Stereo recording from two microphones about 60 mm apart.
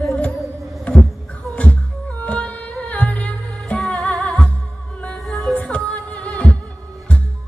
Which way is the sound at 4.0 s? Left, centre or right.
Centre.